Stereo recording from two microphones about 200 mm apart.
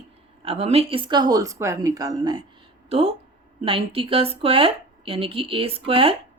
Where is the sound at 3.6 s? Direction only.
30° right (ahead or behind).